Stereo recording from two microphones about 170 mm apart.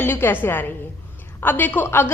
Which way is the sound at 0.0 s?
10° left (ahead or behind).